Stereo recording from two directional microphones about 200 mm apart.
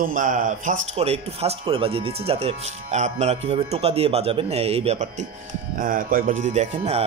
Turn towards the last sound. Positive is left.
turn(degrees=-30)  # may be behind; listen again after turning